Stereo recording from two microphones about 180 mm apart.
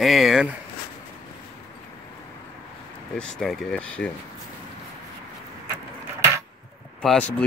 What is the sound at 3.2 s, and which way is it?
Speech, centre (ahead or behind).